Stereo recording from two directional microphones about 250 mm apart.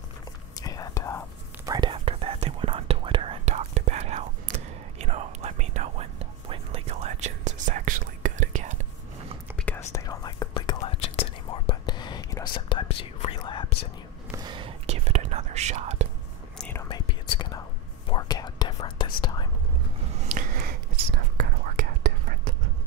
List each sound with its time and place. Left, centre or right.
0.6 s whispering: centre
1.7 s whispering: centre
9.6 s whispering: centre
14.3 s whispering: centre
16.5 s whispering: centre
20.2 s a sound: right